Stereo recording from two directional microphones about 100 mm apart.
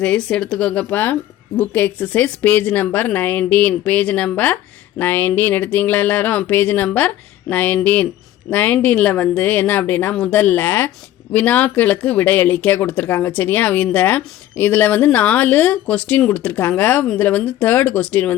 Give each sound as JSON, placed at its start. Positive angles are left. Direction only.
{"t": 0.0, "sound": "speech", "side_deg": 10}